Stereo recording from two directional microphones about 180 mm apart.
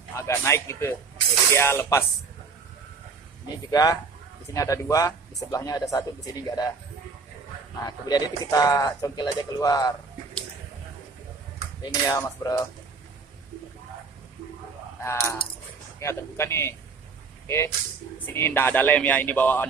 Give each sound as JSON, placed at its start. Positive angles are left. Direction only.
{"t": 0.1, "sound": "speech", "side_deg": 15}
{"t": 3.7, "sound": "speech", "side_deg": 20}
{"t": 7.8, "sound": "speech", "side_deg": 20}
{"t": 11.9, "sound": "speech", "side_deg": 20}
{"t": 15.0, "sound": "speech", "side_deg": 15}
{"t": 18.2, "sound": "speech", "side_deg": 10}